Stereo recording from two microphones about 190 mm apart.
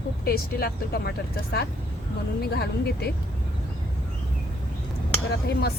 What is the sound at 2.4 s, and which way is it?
Speech, 55° left (ahead or behind).